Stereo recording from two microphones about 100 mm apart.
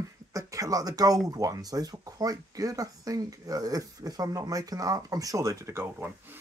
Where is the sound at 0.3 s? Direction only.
35° right (ahead or behind).